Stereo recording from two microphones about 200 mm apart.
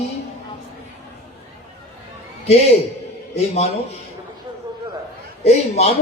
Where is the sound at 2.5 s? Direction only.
30° left (ahead or behind).